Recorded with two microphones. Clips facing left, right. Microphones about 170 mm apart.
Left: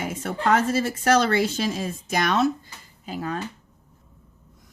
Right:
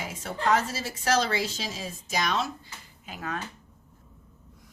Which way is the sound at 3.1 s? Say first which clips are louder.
Left 6 dB; 35° left (ahead or behind).